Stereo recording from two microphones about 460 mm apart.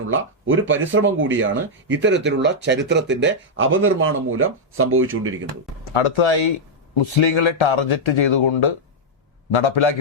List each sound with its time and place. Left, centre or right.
0.1 s speech: right
5.9 s speech: left